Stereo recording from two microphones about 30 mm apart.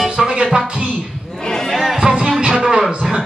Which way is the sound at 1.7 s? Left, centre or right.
Centre.